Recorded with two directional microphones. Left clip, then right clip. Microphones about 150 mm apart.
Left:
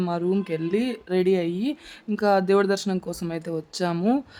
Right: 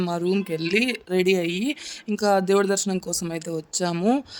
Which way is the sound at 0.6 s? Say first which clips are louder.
Right 3 dB; 65° right (ahead or behind).